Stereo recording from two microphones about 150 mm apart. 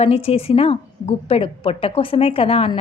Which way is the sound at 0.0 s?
40° left (ahead or behind).